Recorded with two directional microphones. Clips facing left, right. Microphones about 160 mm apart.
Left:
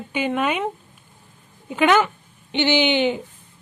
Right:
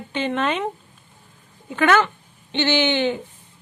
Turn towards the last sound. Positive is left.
turn(degrees=15)  # may be behind; listen again after turning